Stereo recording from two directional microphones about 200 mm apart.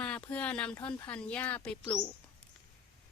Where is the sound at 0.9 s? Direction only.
10° left (ahead or behind).